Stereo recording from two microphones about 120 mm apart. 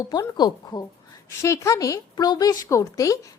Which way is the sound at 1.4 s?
25° left (ahead or behind).